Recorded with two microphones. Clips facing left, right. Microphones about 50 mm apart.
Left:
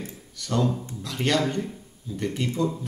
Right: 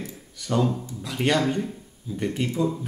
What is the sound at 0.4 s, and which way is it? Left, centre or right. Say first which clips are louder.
Speech: right 1 dB; centre.